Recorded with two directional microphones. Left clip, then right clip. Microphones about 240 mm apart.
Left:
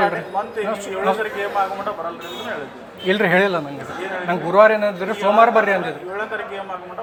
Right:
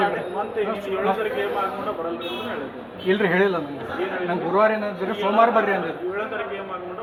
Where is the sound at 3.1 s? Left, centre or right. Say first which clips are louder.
Left 3 dB; left.